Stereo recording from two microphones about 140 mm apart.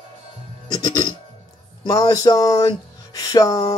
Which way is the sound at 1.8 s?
25° left (ahead or behind).